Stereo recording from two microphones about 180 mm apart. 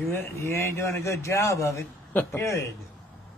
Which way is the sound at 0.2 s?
15° left (ahead or behind).